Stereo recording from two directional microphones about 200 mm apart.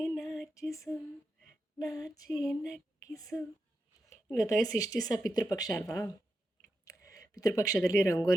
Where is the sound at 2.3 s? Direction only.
5° right (ahead or behind).